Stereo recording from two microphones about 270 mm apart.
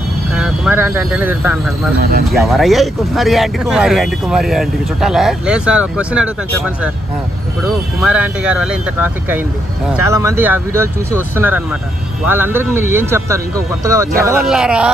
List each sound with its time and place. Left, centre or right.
0.4 s speech: centre
2.0 s speech: right
2.2 s speech: centre
8.0 s speech: centre